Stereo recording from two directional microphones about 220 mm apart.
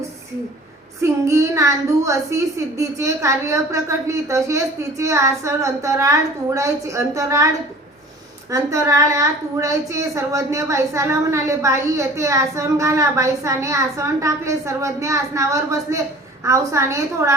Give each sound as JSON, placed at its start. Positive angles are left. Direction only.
{"t": 1.0, "sound": "speech", "side_deg": -15}
{"t": 8.5, "sound": "speech", "side_deg": -15}